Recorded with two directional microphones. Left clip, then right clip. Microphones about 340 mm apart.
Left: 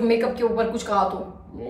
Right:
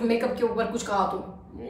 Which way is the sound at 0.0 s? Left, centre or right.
Centre.